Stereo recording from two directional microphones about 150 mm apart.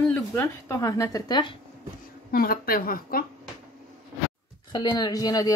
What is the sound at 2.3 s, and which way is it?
Speech, 80° left.